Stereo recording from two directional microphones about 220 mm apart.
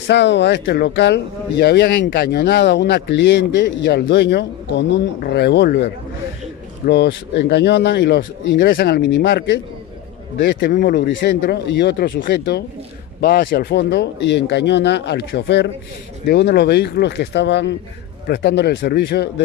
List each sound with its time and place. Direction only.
0.0 s speech: 55° left (ahead or behind)
6.9 s speech: 50° left (ahead or behind)